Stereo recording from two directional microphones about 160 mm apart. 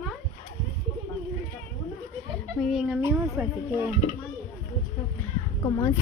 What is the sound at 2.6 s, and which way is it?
Speech, centre (ahead or behind).